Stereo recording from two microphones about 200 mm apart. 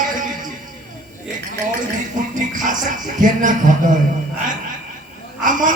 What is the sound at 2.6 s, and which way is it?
Speech, 40° right (ahead or behind).